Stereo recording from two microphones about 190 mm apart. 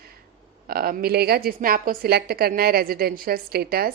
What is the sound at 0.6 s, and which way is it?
A woman's voice, 50° right (ahead or behind).